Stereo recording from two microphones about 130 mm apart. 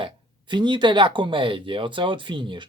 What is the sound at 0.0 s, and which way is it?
Speech, 35° right (ahead or behind).